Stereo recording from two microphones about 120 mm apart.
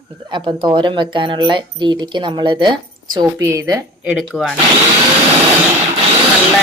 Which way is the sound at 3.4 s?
25° right (ahead or behind).